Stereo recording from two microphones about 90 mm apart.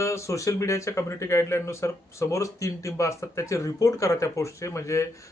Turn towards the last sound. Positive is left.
turn(degrees=35)  # may be behind; listen again after turning